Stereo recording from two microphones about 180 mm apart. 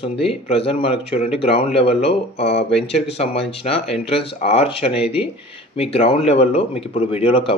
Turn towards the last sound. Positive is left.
turn(degrees=30)  # may be behind; listen again after turning